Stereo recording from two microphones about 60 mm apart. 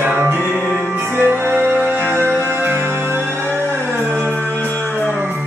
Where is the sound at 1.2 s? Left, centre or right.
Right.